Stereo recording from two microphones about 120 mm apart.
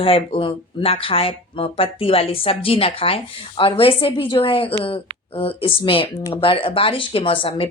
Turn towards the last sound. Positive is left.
turn(degrees=50)  # may be behind; listen again after turning